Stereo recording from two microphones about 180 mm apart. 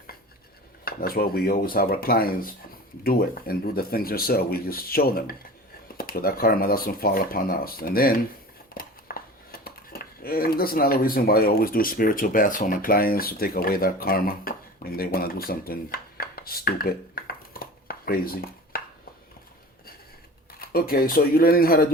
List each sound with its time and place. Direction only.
0.9 s speech: 55° left (ahead or behind)
17.2 s a sound: 55° left (ahead or behind)
20.5 s speech: 55° left (ahead or behind)